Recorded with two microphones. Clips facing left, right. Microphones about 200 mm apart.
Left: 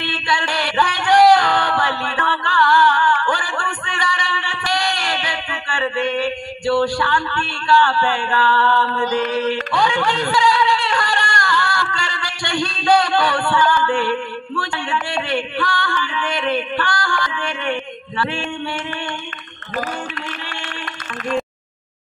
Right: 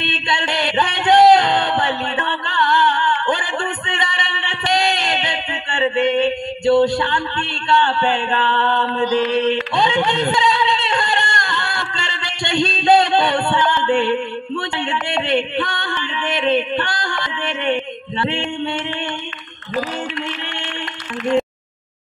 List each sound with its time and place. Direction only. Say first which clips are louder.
0.0 s a sound: even; 20° right (ahead or behind)
9.3 s speech: right 2 dB; 20° right (ahead or behind)
18.2 s singing: right 2 dB; 20° right (ahead or behind)